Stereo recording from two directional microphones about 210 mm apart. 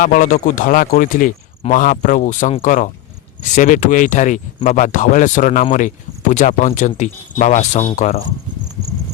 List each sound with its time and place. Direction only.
0.0 s speech: 40° left (ahead or behind)